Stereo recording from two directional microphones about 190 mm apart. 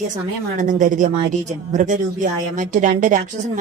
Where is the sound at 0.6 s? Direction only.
40° right (ahead or behind).